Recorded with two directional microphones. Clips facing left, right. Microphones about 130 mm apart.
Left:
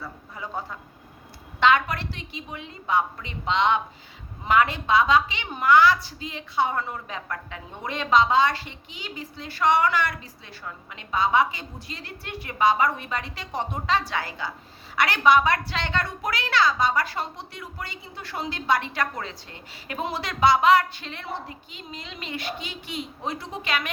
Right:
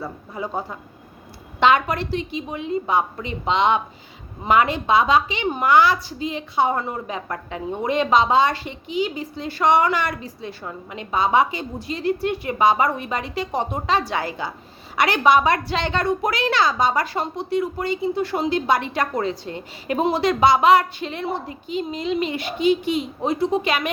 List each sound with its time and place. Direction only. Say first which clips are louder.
0.3 s a woman's voice: right 6 dB; 20° right (ahead or behind)